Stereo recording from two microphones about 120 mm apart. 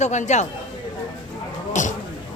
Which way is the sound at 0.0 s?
75° left (ahead or behind).